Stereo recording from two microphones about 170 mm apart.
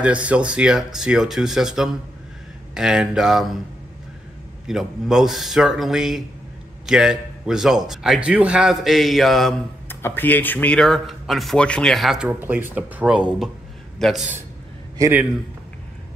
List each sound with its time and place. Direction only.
0.0 s speech: 5° right (ahead or behind)
4.6 s speech: centre (ahead or behind)
9.8 s a man's voice: 10° left (ahead or behind)
15.0 s a man's voice: 15° right (ahead or behind)